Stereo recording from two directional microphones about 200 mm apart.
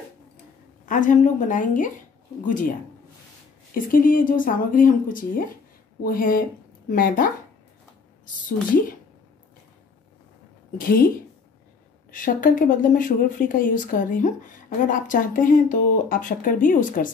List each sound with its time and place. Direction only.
0.8 s speech: 40° left (ahead or behind)
3.7 s speech: 45° left (ahead or behind)
8.5 s speech: 45° left (ahead or behind)
10.8 s speech: 45° left (ahead or behind)
12.1 s speech: 45° left (ahead or behind)